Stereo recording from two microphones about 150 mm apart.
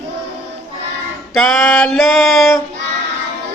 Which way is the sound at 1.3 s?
5° left (ahead or behind).